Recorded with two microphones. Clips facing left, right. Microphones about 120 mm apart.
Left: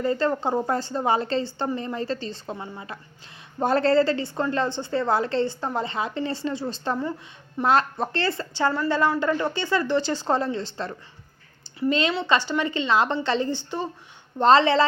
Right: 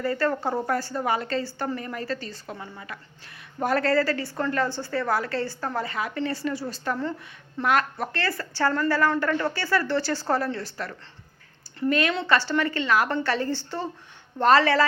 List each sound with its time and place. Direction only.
0.0 s a woman's voice: 20° left (ahead or behind)